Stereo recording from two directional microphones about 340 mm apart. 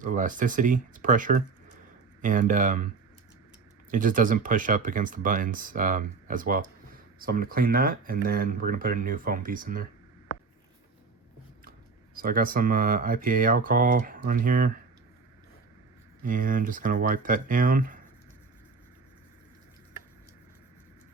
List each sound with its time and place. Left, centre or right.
0.0 s speech: right
3.9 s speech: right
12.1 s speech: right
16.2 s speech: right